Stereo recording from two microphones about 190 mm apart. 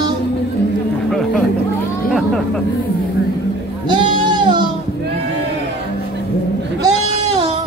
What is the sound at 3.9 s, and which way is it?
Music, 25° right (ahead or behind).